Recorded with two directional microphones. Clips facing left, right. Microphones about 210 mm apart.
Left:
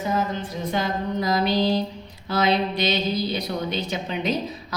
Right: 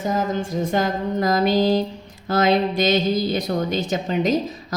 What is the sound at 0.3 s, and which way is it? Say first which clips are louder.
Speech: right 5 dB; 45° right (ahead or behind).